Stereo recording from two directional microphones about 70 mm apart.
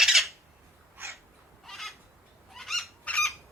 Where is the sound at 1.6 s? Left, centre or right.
Centre.